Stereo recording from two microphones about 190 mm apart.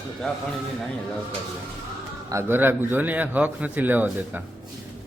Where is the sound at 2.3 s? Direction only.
15° right (ahead or behind).